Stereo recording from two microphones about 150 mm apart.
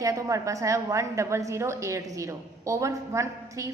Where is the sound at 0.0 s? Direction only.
20° right (ahead or behind).